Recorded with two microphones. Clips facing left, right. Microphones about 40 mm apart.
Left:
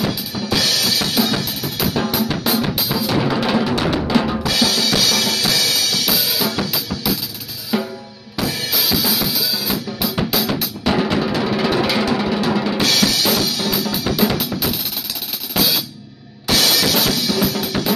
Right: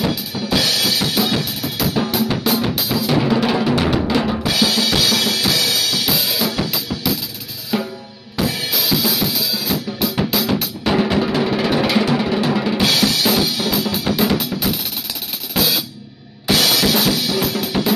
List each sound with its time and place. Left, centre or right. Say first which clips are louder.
0.1 s drum: right 1 dB; centre
4.5 s drum kit: even; centre
7.7 s drum: even; centre
8.4 s drum kit: right 1 dB; centre
11.4 s drum: even; centre
16.4 s drum kit: right 1 dB; centre